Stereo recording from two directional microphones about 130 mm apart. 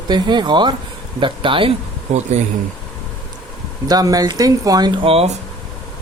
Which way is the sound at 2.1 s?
60° right (ahead or behind).